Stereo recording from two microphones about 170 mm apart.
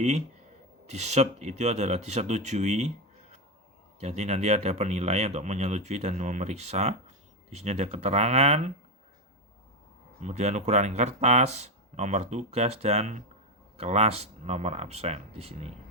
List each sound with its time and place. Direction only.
0.9 s speech: 40° right (ahead or behind)
4.0 s speech: 40° right (ahead or behind)
10.2 s speech: 45° right (ahead or behind)